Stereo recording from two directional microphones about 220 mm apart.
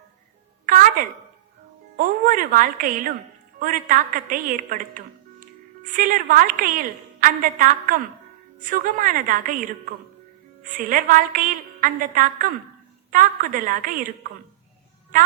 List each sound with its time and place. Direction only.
0.6 s music: 40° right (ahead or behind)
2.0 s a woman's voice: 40° right (ahead or behind)